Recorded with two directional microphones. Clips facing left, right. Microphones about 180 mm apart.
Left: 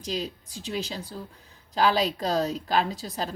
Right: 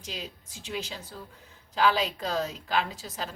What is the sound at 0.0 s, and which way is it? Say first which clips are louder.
A woman's voice: left 8 dB; 35° left (ahead or behind).